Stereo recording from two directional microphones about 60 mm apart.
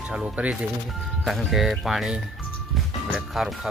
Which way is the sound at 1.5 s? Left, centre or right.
Centre.